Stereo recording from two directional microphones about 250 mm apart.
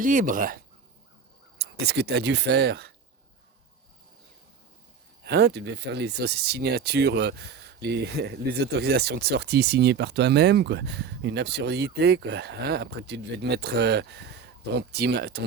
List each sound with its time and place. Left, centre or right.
0.0 s speech: right
5.2 s speech: right